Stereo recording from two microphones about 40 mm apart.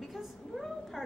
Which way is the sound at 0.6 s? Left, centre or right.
Centre.